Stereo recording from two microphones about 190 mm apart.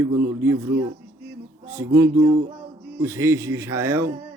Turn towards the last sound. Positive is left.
turn(degrees=-10)  # may be behind; listen again after turning